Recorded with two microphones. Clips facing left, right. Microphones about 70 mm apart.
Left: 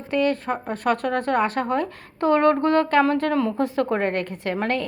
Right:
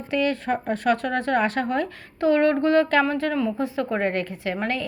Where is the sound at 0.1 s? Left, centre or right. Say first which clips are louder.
Left 1 dB; left.